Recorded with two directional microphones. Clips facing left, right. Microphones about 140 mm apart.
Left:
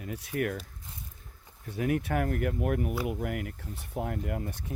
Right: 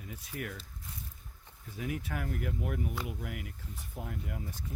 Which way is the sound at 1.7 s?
60° left (ahead or behind).